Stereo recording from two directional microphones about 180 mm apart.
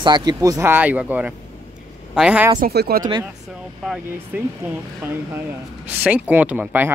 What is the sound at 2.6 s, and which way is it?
Speech, 60° right (ahead or behind).